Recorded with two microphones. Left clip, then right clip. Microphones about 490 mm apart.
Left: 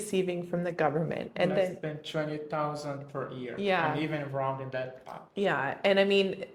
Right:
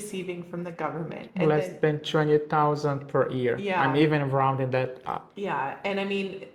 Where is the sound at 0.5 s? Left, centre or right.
Left.